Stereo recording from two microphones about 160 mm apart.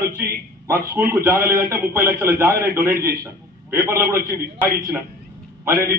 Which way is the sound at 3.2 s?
15° right (ahead or behind).